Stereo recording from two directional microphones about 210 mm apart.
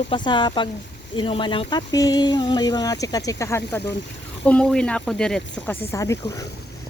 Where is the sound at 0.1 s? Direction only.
20° left (ahead or behind).